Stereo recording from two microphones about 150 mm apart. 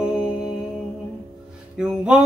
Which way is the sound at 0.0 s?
5° right (ahead or behind).